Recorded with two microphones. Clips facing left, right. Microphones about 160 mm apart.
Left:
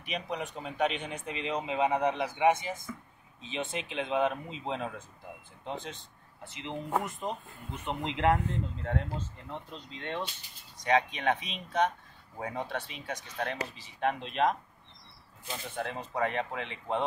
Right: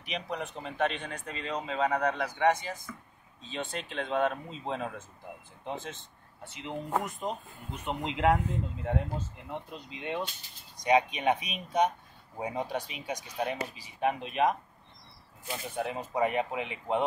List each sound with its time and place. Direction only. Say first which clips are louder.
0.0 s speech: even; centre (ahead or behind); by 3.0 s 20° left (ahead or behind)
3.7 s speech: even; 5° left (ahead or behind); by 17.0 s 10° right (ahead or behind)